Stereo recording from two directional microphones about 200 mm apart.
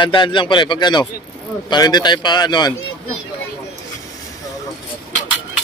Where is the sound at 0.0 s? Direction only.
25° left (ahead or behind).